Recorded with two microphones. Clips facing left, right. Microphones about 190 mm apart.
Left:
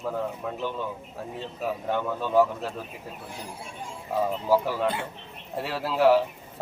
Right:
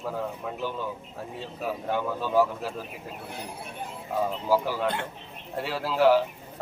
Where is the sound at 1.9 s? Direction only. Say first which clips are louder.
Even; 5° right (ahead or behind).